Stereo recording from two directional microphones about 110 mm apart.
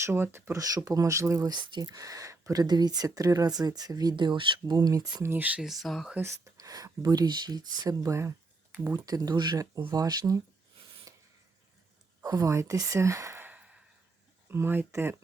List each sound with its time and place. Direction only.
0.0 s speech: 20° right (ahead or behind); by 5.2 s 40° right (ahead or behind)
5.2 s speech: 20° right (ahead or behind)
5.6 s speech: centre (ahead or behind)
6.1 s speech: 25° right (ahead or behind)
12.2 s speech: 35° right (ahead or behind); by 13.8 s 10° right (ahead or behind)
14.4 s speech: 20° right (ahead or behind)